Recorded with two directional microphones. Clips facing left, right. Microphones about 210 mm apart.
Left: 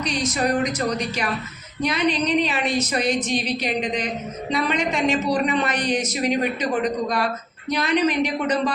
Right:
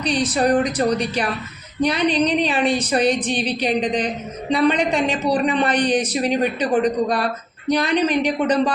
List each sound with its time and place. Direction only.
0.0 s a man's voice: 35° right (ahead or behind)